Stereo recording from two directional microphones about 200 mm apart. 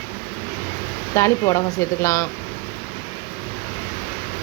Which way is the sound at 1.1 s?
15° left (ahead or behind).